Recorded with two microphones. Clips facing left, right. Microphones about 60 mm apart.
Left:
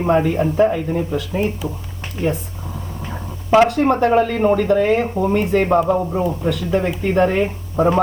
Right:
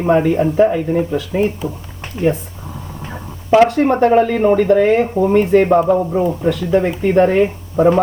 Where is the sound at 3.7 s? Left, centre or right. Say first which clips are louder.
Right 3 dB; right.